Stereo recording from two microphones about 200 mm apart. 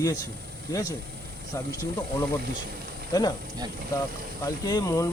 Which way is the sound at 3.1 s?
20° left (ahead or behind).